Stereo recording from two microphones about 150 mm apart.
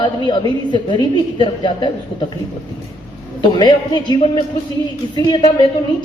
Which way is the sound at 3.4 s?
30° left (ahead or behind).